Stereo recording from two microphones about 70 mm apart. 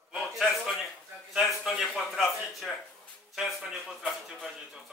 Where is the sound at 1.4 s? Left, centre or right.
Centre.